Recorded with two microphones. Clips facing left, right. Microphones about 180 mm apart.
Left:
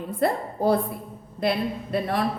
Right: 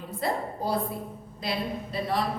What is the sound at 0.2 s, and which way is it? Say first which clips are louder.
A woman's voice: left 6 dB; 60° left (ahead or behind).